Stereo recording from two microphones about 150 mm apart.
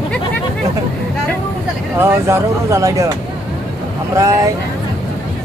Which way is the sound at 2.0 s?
20° right (ahead or behind).